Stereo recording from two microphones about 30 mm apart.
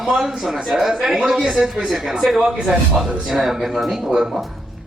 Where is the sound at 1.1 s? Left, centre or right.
Right.